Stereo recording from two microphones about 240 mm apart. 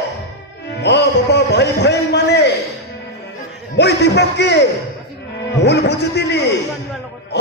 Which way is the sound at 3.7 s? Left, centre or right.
Left.